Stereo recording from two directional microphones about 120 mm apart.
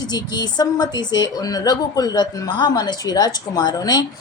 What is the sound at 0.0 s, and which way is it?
Speech, 35° left (ahead or behind).